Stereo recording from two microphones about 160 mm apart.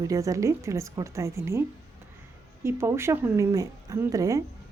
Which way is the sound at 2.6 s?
15° right (ahead or behind).